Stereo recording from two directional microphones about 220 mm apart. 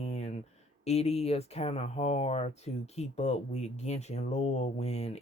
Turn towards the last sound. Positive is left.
turn(degrees=30)  # may be behind; listen again after turning